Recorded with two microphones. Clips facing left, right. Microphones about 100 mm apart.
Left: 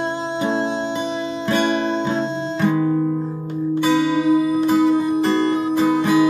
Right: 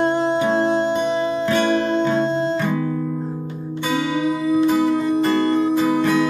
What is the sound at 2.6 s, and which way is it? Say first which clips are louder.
Guitar: left 3 dB; 5° left (ahead or behind).